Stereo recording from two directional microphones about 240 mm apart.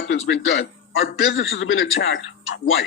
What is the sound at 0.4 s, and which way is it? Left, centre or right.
Speech, left.